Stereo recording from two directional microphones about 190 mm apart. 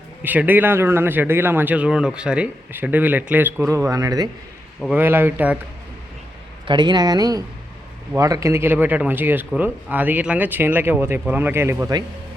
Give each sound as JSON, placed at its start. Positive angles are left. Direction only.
{"t": 0.2, "sound": "speech", "side_deg": -10}
{"t": 4.8, "sound": "speech", "side_deg": -5}
{"t": 6.7, "sound": "speech", "side_deg": -25}